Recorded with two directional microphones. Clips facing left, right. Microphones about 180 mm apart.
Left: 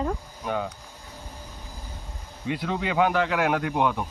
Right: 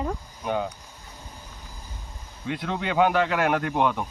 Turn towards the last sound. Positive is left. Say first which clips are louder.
# right 1 dB
turn(degrees=0)  # may be behind; listen again after turning